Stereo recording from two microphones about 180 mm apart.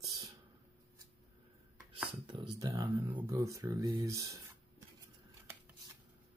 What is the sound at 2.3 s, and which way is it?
Speech, 25° right (ahead or behind).